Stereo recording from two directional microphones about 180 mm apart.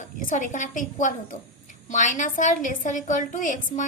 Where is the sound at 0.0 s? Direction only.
45° left (ahead or behind).